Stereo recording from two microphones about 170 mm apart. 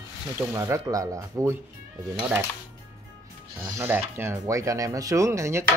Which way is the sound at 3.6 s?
15° right (ahead or behind).